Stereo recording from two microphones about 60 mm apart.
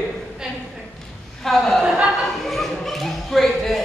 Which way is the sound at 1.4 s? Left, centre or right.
Centre.